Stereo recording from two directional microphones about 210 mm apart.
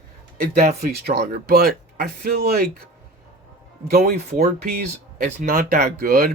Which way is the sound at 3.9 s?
50° right (ahead or behind).